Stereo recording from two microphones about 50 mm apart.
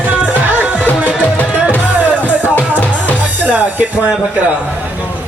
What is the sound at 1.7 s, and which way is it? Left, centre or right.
Music, right.